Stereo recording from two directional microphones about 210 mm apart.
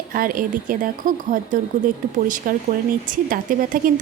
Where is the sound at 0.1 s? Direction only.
40° right (ahead or behind).